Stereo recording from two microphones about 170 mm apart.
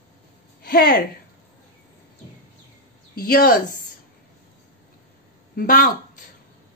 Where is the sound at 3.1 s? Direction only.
60° left (ahead or behind).